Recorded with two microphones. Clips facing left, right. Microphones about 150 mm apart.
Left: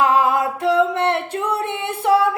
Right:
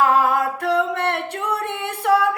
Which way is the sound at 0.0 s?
20° left (ahead or behind).